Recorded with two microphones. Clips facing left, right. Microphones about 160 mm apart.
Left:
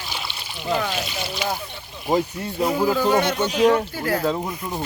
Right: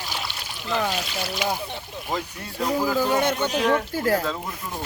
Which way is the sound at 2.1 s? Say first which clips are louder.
Left 8 dB; 25° left (ahead or behind).